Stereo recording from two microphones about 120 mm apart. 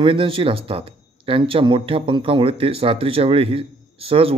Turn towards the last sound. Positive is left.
turn(degrees=-50)  # may be behind; listen again after turning